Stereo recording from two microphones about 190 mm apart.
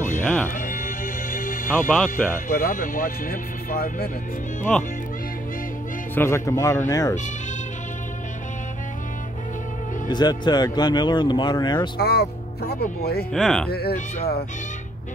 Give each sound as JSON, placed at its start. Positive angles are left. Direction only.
{"t": 0.2, "sound": "music", "side_deg": 10}
{"t": 0.6, "sound": "music", "side_deg": 45}
{"t": 2.0, "sound": "speech", "side_deg": 45}
{"t": 6.1, "sound": "speech", "side_deg": 15}
{"t": 10.0, "sound": "speech", "side_deg": 20}
{"t": 12.0, "sound": "speech", "side_deg": 60}
{"t": 13.3, "sound": "speech", "side_deg": 5}
{"t": 13.7, "sound": "speech", "side_deg": 55}
{"t": 13.9, "sound": "speech", "side_deg": 40}